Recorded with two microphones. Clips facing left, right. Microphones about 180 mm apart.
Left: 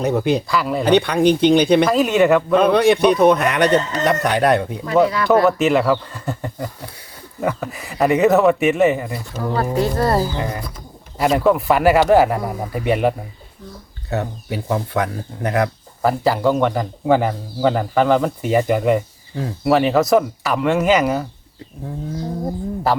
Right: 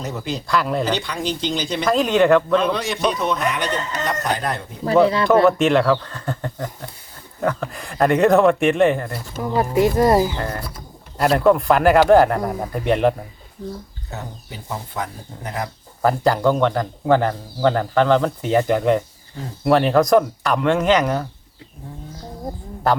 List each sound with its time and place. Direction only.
0.0 s speech: 60° left (ahead or behind)
0.4 s speech: centre (ahead or behind)
0.9 s speech: 60° left (ahead or behind)
1.9 s speech: 5° left (ahead or behind)
2.6 s speech: 60° left (ahead or behind)
5.0 s speech: 25° right (ahead or behind)
5.5 s speech: centre (ahead or behind)
9.6 s speech: 15° right (ahead or behind)
11.2 s speech: centre (ahead or behind)
14.1 s speech: 70° left (ahead or behind)
16.0 s speech: 5° left (ahead or behind)
22.9 s speech: centre (ahead or behind)